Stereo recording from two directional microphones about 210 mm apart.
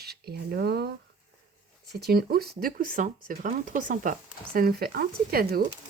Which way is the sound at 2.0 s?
50° right (ahead or behind).